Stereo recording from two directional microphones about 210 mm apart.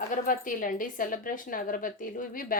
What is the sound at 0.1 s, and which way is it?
A woman's voice, 40° left (ahead or behind).